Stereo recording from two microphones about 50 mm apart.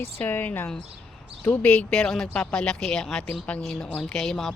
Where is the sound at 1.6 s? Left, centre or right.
Left.